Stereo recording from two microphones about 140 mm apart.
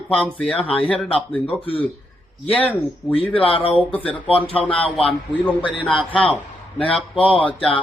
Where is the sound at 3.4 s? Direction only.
40° left (ahead or behind).